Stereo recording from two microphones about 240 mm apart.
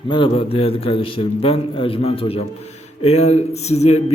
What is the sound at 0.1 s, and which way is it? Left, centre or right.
Speech, left.